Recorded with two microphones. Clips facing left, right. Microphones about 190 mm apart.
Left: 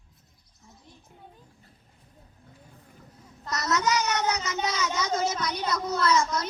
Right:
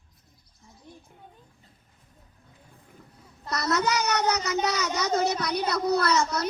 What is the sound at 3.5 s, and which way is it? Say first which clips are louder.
Speech: right 1 dB; 35° right (ahead or behind).